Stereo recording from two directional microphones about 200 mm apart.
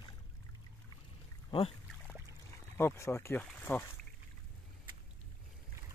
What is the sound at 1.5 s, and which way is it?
Speech, 30° left (ahead or behind).